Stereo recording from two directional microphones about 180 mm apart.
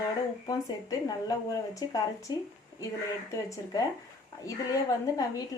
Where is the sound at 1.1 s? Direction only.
20° left (ahead or behind).